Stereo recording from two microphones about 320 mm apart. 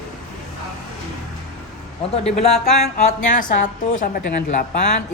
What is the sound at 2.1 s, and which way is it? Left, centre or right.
Speech, centre.